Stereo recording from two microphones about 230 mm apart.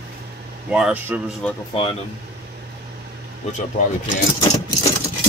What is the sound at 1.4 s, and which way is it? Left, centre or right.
Speech, centre.